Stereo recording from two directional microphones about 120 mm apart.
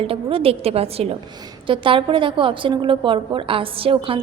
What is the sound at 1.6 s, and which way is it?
A woman's voice, 45° right (ahead or behind).